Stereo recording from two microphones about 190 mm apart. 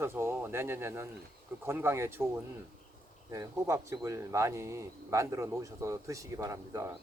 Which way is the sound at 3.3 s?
15° right (ahead or behind).